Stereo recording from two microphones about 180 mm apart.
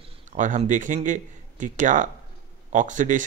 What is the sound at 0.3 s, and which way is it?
Speech, 45° right (ahead or behind).